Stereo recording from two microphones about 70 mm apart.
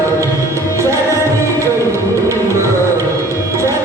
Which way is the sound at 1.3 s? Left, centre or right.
Right.